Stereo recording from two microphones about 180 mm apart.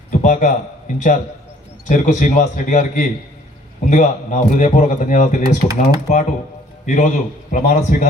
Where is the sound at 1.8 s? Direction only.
45° left (ahead or behind).